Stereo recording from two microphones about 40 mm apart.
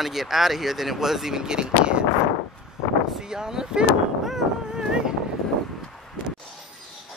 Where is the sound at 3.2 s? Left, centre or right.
Centre.